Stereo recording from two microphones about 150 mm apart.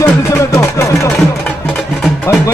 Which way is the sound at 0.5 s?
20° left (ahead or behind).